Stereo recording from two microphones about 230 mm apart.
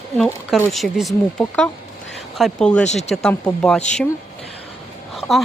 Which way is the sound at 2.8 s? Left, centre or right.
Left.